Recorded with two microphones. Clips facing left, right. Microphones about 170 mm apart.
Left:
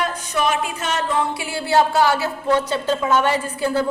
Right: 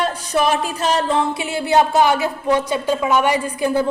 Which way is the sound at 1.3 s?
20° right (ahead or behind).